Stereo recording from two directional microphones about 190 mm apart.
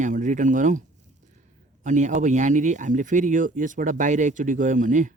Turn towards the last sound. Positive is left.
turn(degrees=-40)  # may be behind; listen again after turning